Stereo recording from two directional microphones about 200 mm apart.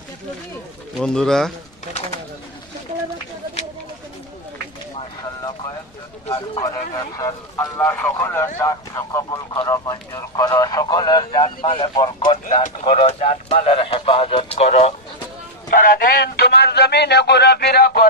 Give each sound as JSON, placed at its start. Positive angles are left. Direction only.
{"t": 0.9, "sound": "speech", "side_deg": 5}
{"t": 6.3, "sound": "speech", "side_deg": 25}
{"t": 7.0, "sound": "speech", "side_deg": 15}
{"t": 15.7, "sound": "a man's voice", "side_deg": 45}